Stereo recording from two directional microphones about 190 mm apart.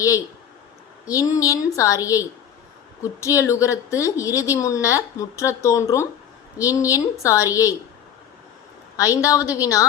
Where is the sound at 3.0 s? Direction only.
15° left (ahead or behind).